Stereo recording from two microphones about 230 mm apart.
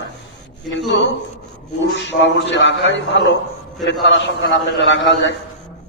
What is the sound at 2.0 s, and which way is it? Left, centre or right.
A man's voice, left.